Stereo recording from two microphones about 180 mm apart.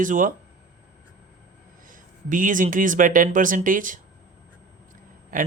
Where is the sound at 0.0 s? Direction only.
45° right (ahead or behind).